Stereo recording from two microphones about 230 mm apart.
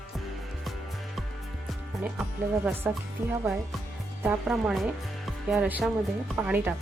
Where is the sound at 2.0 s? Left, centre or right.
Centre.